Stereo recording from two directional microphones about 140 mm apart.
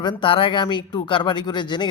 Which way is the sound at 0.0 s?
35° left (ahead or behind).